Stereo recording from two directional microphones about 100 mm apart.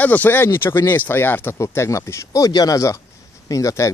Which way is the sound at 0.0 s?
15° left (ahead or behind).